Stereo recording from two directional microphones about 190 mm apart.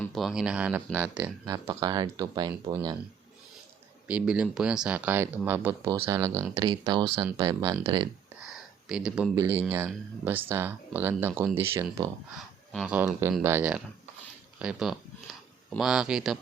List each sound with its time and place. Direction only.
0.0 s speech: centre (ahead or behind)
1.5 s speech: 20° right (ahead or behind)
4.0 s speech: 5° right (ahead or behind)
8.9 s speech: 5° right (ahead or behind)